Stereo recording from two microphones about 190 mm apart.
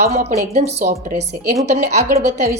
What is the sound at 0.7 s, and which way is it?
A woman's voice, 50° right (ahead or behind).